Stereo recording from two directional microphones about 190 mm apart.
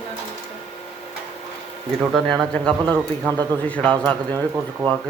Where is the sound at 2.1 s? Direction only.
5° left (ahead or behind).